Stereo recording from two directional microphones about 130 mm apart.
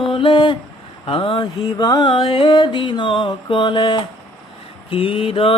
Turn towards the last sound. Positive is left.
turn(degrees=45)  # may be behind; listen again after turning